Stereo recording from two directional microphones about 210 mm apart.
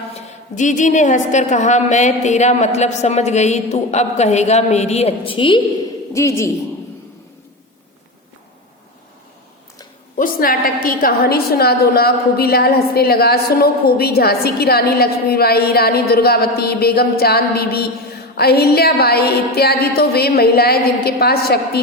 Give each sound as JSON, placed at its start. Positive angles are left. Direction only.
{"t": 0.5, "sound": "a woman's voice", "side_deg": 35}
{"t": 6.1, "sound": "a man's voice", "side_deg": 15}
{"t": 10.2, "sound": "a woman's voice", "side_deg": 40}